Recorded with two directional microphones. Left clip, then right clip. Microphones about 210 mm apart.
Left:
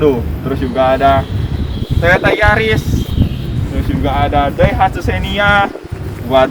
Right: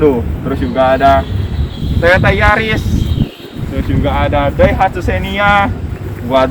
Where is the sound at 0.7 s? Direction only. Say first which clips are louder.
Right 2 dB; 20° left (ahead or behind).